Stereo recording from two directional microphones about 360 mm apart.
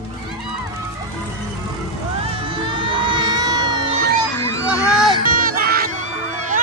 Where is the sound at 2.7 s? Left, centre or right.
Centre.